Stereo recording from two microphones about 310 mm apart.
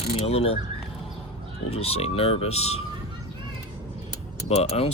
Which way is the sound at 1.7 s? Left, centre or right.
Centre.